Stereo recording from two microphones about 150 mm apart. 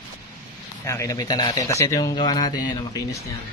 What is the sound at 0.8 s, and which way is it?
Speech, 20° left (ahead or behind).